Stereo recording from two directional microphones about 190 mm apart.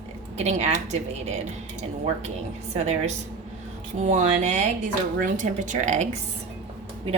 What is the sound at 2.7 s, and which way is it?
A woman's voice, 35° right (ahead or behind).